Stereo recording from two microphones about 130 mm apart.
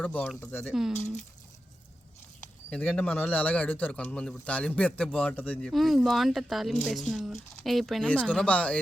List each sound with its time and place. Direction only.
0.0 s a man's voice: 10° left (ahead or behind)
0.7 s speech: 5° right (ahead or behind)
2.6 s a man's voice: 10° left (ahead or behind)